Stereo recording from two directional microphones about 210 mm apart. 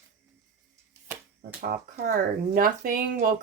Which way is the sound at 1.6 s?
40° right (ahead or behind).